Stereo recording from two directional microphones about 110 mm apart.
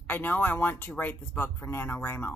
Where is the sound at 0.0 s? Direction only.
15° left (ahead or behind).